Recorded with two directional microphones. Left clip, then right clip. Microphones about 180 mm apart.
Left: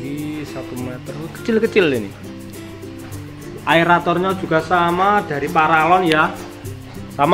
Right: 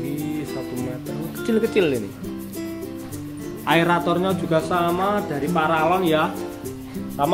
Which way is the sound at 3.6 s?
25° right (ahead or behind).